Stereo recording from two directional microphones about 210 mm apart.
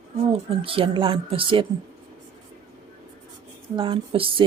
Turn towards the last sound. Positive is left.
turn(degrees=-25)  # may be behind; listen again after turning